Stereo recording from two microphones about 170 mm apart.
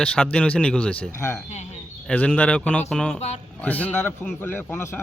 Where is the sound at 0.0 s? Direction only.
5° left (ahead or behind).